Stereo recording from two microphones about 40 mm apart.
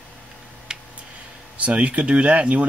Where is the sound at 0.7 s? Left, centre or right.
Centre.